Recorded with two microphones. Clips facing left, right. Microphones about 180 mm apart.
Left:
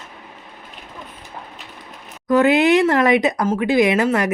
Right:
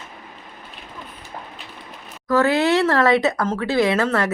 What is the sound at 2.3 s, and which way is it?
Speech, 20° left (ahead or behind).